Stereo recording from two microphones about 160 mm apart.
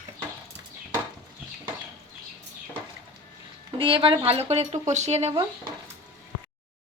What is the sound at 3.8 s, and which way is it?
Frying, 35° right (ahead or behind).